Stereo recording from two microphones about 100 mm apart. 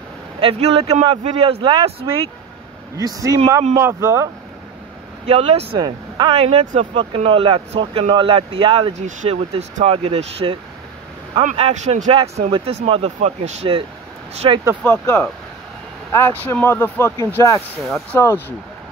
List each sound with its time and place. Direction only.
0.4 s speech: 75° right (ahead or behind)
1.6 s speech: 50° right (ahead or behind)
3.0 s speech: 35° right (ahead or behind)
5.2 s a man's voice: 85° right
5.8 s speech: 50° right (ahead or behind)
6.3 s speech: 75° right (ahead or behind)
11.3 s a man's voice: 85° right
12.4 s speech: 55° right (ahead or behind)
12.8 s speech: 90° right
14.4 s speech: 55° right (ahead or behind)
14.9 s speech: 20° left (ahead or behind)